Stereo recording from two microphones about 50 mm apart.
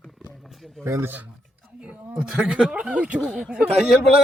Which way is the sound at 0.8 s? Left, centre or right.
Right.